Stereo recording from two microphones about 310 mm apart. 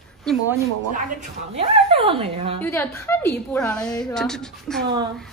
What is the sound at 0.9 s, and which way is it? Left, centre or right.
A woman's voice, right.